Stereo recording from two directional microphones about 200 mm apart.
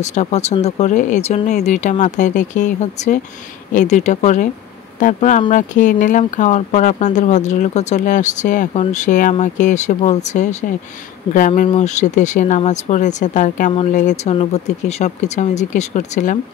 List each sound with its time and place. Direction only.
0.0 s speech: 35° left (ahead or behind)